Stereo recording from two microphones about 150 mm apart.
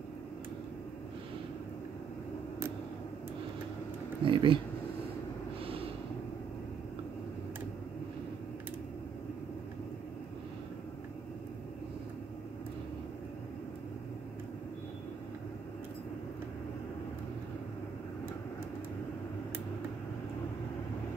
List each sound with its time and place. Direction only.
4.2 s speech: 35° right (ahead or behind)